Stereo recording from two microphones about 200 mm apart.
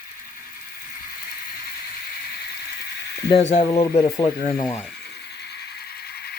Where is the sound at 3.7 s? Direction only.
20° left (ahead or behind).